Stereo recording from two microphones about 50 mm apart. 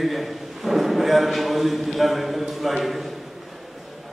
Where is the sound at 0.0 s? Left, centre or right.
Centre.